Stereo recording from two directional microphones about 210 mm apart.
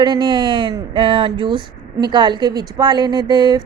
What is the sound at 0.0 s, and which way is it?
Speech, 20° right (ahead or behind).